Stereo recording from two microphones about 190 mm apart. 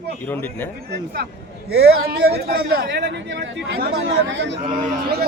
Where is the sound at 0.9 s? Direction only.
60° right (ahead or behind).